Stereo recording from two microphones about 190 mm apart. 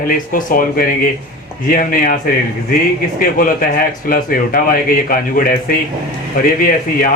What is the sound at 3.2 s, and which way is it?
Speech, 50° left (ahead or behind).